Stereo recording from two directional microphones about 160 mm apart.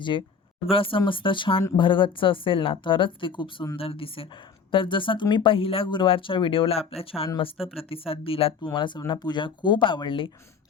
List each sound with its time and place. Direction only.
0.7 s speech: 35° left (ahead or behind)